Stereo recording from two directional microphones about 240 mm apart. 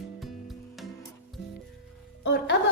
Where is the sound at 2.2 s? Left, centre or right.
Left.